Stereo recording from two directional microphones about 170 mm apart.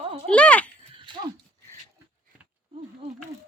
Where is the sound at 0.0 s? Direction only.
30° right (ahead or behind).